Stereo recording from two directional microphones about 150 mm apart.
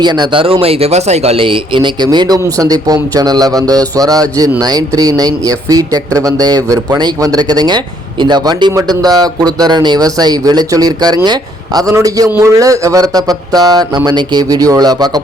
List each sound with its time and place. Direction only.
0.0 s speech: 30° right (ahead or behind)